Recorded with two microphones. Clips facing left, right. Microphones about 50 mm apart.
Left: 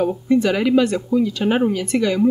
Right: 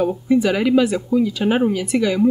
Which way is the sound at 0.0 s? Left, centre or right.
Centre.